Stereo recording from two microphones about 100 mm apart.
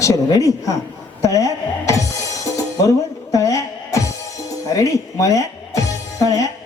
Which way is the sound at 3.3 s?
35° left (ahead or behind).